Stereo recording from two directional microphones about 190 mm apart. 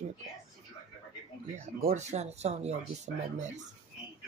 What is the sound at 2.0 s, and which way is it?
Speech, 35° right (ahead or behind).